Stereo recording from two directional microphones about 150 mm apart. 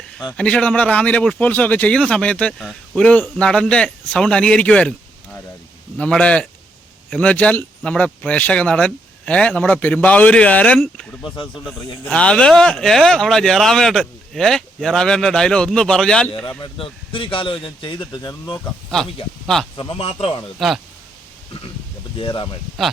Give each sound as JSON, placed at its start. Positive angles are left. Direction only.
{"t": 0.3, "sound": "speech", "side_deg": 5}
{"t": 10.8, "sound": "speech", "side_deg": 0}
{"t": 16.5, "sound": "speech", "side_deg": 35}
{"t": 18.6, "sound": "speech", "side_deg": 5}
{"t": 19.7, "sound": "speech", "side_deg": 35}
{"t": 20.6, "sound": "speech", "side_deg": 0}
{"t": 22.2, "sound": "speech", "side_deg": 35}